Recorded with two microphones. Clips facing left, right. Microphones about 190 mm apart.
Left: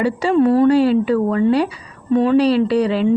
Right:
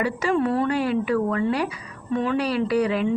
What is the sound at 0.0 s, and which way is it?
Speech, 30° left (ahead or behind).